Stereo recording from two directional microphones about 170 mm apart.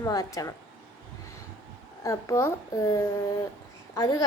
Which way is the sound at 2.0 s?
15° left (ahead or behind).